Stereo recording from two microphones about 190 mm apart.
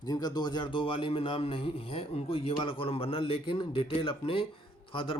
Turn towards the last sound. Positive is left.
turn(degrees=30)  # may be behind; listen again after turning